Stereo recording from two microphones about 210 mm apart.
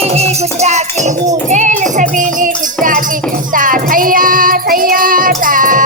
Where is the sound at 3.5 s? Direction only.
40° right (ahead or behind).